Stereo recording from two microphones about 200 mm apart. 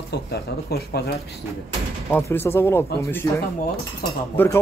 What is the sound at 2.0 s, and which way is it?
Speech, 10° left (ahead or behind).